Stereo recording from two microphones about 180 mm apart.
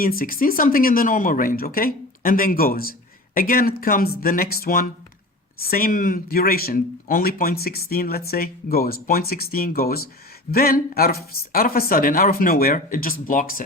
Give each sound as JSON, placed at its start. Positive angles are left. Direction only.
{"t": 0.0, "sound": "speech", "side_deg": 55}